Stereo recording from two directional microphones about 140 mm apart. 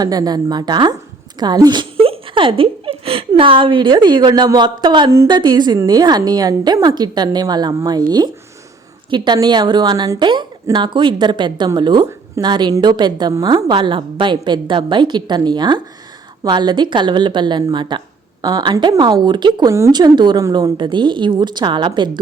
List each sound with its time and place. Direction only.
0.0 s a woman's voice: 25° right (ahead or behind)
9.0 s a woman's voice: 35° right (ahead or behind)